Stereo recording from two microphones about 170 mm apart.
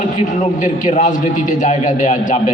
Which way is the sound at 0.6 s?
45° left (ahead or behind).